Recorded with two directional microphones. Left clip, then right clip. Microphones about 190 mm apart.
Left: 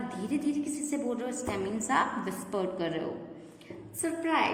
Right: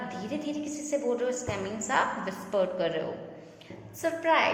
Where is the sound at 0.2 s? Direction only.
20° left (ahead or behind).